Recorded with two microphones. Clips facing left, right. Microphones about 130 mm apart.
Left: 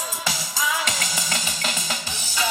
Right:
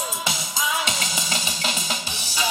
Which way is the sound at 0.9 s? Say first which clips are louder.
Even; 20° right (ahead or behind).